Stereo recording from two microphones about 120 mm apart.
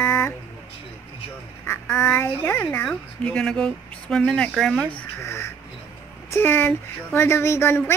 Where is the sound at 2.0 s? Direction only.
15° left (ahead or behind).